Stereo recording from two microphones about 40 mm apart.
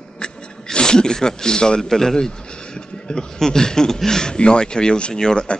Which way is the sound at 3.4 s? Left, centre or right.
Centre.